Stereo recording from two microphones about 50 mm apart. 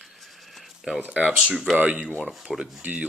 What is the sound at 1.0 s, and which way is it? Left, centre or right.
Speech, right.